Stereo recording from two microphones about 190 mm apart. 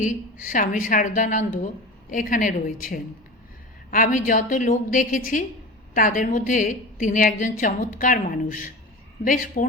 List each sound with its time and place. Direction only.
0.0 s a woman's voice: 45° left (ahead or behind)